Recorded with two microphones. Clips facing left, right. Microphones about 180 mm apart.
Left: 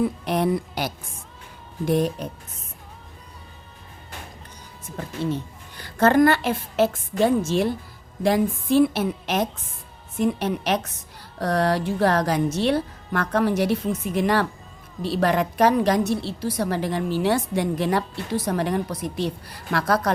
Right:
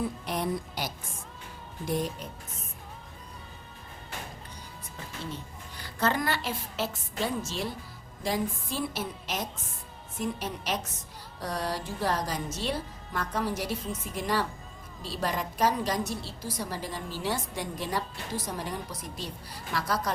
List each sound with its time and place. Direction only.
0.0 s a woman's voice: 65° left (ahead or behind)
4.9 s a woman's voice: 60° left (ahead or behind)